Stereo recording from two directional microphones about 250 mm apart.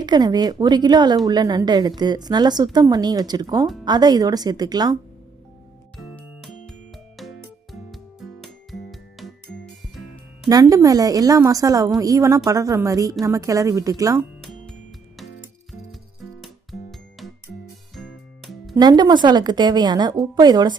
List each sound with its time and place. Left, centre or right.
0.0 s a woman's voice: centre
6.0 s music: centre
10.5 s a woman's voice: centre
14.4 s music: centre
16.9 s music: centre
18.7 s a woman's voice: centre